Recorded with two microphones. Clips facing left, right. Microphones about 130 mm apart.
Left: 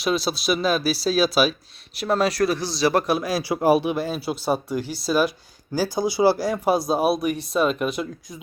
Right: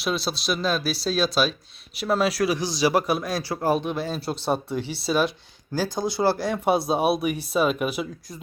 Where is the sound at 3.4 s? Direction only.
15° left (ahead or behind).